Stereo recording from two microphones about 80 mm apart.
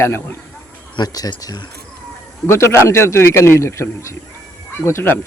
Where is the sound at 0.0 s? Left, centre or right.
Left.